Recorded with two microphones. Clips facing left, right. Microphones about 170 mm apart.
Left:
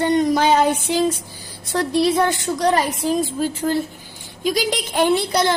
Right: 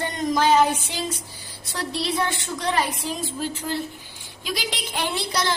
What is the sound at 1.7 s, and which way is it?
A woman's voice, 50° left (ahead or behind).